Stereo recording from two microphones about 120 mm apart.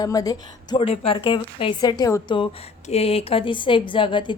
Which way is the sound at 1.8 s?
35° left (ahead or behind).